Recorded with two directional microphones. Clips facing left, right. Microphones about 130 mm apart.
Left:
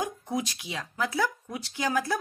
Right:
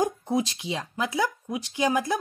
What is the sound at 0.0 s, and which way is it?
Speech, 25° right (ahead or behind).